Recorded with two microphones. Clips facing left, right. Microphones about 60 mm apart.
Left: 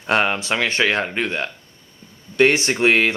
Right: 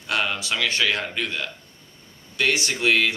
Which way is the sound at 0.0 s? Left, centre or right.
Left.